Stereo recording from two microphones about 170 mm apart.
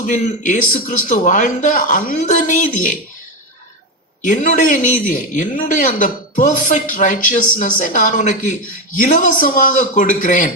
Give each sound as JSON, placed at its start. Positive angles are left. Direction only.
{"t": 0.0, "sound": "speech", "side_deg": 45}
{"t": 4.2, "sound": "speech", "side_deg": 50}